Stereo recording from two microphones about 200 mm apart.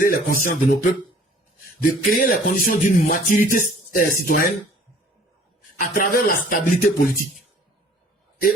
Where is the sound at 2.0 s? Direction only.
45° left (ahead or behind).